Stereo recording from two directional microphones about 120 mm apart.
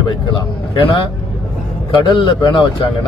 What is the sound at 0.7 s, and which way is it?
Speech, 40° left (ahead or behind).